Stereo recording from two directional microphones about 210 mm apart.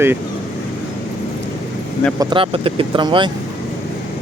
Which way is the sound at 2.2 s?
25° right (ahead or behind).